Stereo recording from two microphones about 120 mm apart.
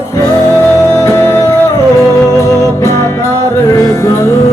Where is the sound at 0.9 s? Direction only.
25° left (ahead or behind).